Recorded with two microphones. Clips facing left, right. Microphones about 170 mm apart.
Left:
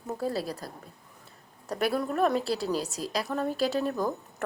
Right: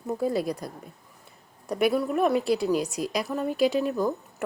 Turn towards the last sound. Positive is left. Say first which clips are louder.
# right 4 dB
turn(degrees=-10)  # may be behind; listen again after turning